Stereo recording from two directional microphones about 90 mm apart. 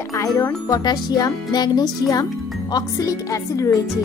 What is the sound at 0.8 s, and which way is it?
Speech, 50° left (ahead or behind).